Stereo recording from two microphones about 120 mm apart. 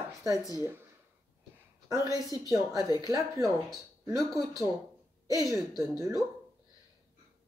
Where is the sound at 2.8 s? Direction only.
30° left (ahead or behind).